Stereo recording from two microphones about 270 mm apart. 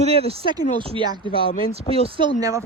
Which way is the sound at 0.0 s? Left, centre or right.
Right.